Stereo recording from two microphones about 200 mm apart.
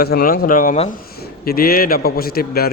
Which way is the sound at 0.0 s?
50° left (ahead or behind).